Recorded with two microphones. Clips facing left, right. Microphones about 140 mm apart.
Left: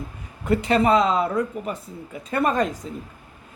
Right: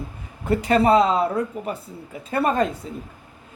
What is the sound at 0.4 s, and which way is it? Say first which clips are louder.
A woman's voice: right 1 dB; 35° right (ahead or behind).